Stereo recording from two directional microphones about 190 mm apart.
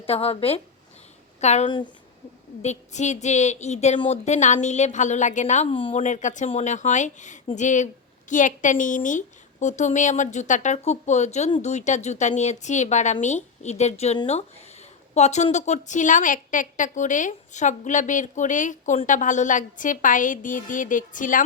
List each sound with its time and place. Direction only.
0.0 s a woman's voice: 30° left (ahead or behind)